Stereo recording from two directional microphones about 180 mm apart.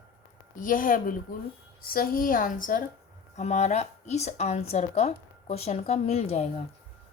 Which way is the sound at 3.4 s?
40° left (ahead or behind).